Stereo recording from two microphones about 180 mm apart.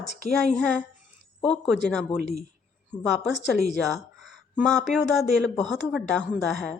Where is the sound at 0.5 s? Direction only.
5° left (ahead or behind).